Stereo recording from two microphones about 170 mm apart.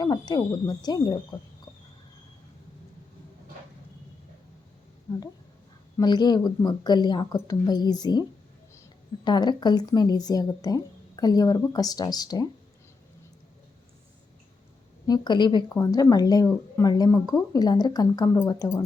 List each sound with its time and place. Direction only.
0.0 s speech: 25° left (ahead or behind)
6.0 s speech: 25° left (ahead or behind)
9.2 s speech: 25° left (ahead or behind)
15.0 s speech: 25° left (ahead or behind)